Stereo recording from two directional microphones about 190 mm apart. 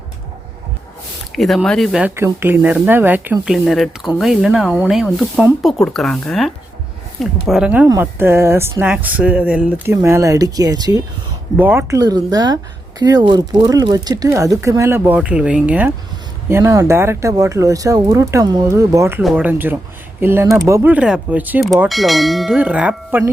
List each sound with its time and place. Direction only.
1.4 s speech: centre (ahead or behind)